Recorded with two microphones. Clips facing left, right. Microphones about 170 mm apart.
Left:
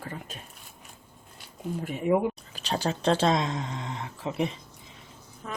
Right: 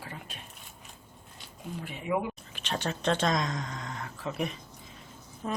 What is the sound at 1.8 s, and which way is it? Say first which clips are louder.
Speech: left 9 dB; 45° left (ahead or behind).